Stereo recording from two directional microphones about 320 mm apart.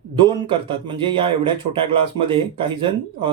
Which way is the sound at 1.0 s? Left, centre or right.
Centre.